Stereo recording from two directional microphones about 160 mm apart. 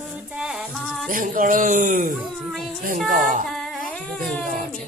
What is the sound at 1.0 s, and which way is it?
Speech, 60° right (ahead or behind).